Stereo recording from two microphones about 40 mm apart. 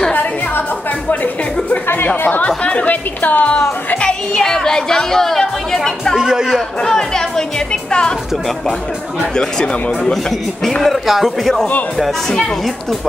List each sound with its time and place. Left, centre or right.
0.1 s music: left
2.4 s speech: left
4.0 s speech: centre
6.1 s a man's voice: centre
6.8 s speech: centre
9.3 s speech: centre
10.6 s speech: centre
10.9 s a man's voice: centre